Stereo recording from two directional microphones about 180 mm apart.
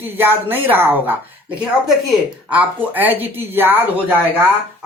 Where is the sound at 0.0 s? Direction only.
10° right (ahead or behind).